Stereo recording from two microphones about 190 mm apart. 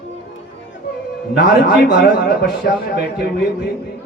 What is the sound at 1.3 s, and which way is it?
A man's voice, 60° left (ahead or behind).